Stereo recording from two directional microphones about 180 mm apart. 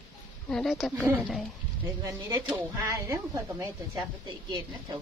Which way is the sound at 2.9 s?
15° right (ahead or behind).